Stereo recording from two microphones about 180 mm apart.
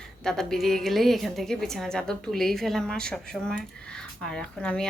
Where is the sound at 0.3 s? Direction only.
5° left (ahead or behind).